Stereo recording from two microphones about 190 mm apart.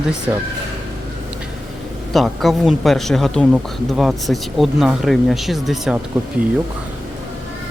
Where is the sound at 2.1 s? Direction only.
Centre (ahead or behind).